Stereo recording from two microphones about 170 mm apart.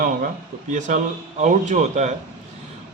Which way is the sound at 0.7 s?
45° right (ahead or behind).